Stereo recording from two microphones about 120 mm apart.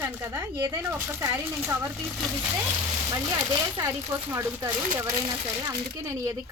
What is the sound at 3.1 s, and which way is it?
Speech, 35° right (ahead or behind).